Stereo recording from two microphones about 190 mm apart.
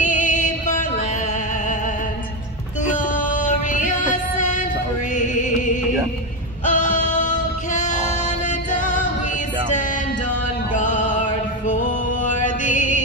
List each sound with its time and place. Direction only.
0.0 s music: 40° left (ahead or behind)
2.9 s music: 45° left (ahead or behind)
6.6 s a sound: 40° left (ahead or behind)
10.7 s music: 40° left (ahead or behind)